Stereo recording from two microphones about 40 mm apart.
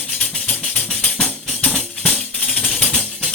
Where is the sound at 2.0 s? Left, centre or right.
Left.